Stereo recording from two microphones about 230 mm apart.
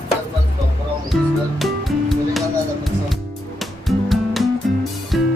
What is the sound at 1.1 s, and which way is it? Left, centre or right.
Music, centre.